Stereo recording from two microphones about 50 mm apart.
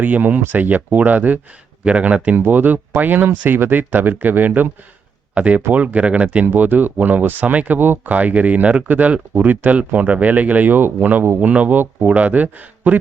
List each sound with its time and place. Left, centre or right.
0.0 s speech: right
2.3 s speech: right
6.4 s speech: right
11.3 s speech: right